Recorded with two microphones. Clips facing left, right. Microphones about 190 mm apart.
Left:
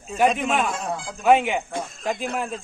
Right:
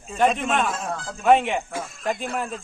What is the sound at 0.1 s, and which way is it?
A man's voice, centre (ahead or behind).